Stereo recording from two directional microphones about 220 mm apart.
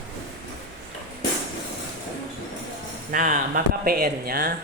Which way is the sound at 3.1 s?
40° right (ahead or behind).